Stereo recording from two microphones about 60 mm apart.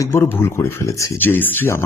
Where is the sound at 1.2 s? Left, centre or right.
Left.